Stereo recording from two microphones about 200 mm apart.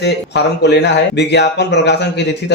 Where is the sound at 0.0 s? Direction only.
55° left (ahead or behind).